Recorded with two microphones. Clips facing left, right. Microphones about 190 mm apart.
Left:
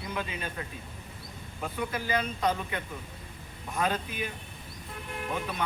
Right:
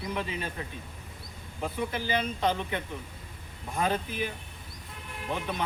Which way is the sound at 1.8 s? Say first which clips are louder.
Even; 30° right (ahead or behind).